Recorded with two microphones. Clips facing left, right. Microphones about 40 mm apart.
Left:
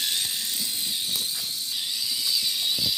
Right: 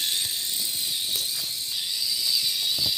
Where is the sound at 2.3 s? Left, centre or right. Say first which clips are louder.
Left 1 dB; centre.